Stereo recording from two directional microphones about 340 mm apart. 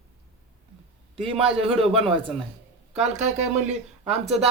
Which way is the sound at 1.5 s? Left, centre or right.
Centre.